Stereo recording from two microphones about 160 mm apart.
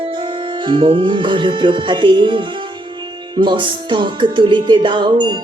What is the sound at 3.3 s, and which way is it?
Music, 30° right (ahead or behind).